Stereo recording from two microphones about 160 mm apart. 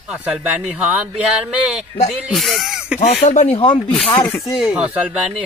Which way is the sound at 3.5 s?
30° left (ahead or behind).